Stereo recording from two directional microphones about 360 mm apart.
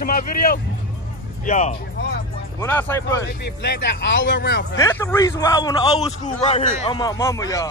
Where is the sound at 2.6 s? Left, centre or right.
Centre.